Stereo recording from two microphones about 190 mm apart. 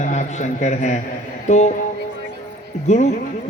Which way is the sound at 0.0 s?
40° left (ahead or behind).